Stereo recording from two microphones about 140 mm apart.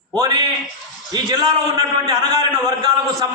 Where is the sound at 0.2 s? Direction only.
25° right (ahead or behind).